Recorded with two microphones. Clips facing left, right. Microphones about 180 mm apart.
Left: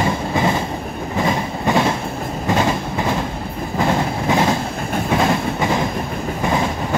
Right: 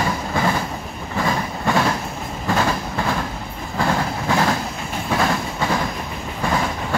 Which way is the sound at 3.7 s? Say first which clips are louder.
Left 2 dB; 20° left (ahead or behind).